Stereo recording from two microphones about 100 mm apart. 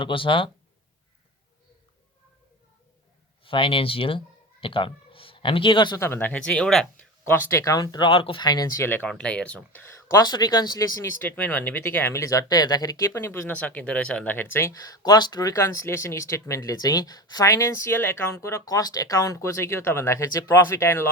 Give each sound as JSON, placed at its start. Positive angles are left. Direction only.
{"t": 0.0, "sound": "speech", "side_deg": 60}
{"t": 3.4, "sound": "speech", "side_deg": 60}
{"t": 6.0, "sound": "speech", "side_deg": 20}
{"t": 6.5, "sound": "speech", "side_deg": 5}
{"t": 7.3, "sound": "speech", "side_deg": 25}
{"t": 8.4, "sound": "speech", "side_deg": 40}
{"t": 8.8, "sound": "speech", "side_deg": 20}
{"t": 9.0, "sound": "speech", "side_deg": 10}
{"t": 10.1, "sound": "speech", "side_deg": 40}
{"t": 11.2, "sound": "speech", "side_deg": 20}
{"t": 14.7, "sound": "speech", "side_deg": 35}